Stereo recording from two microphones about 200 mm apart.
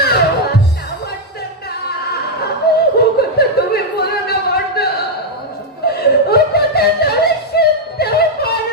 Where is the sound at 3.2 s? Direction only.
50° left (ahead or behind).